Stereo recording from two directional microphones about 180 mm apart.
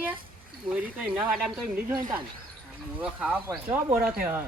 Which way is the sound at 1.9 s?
25° right (ahead or behind).